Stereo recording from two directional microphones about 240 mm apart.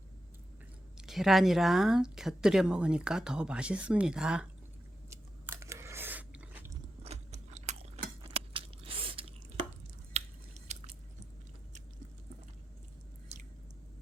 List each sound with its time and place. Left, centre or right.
0.9 s speech: centre
5.0 s biting: centre
7.0 s chewing: right
10.7 s biting: right